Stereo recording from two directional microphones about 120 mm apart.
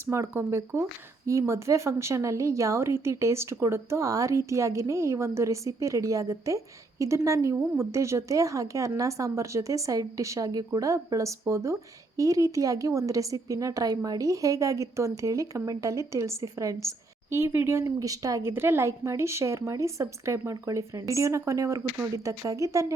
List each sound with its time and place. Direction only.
0.1 s a woman's voice: 25° right (ahead or behind)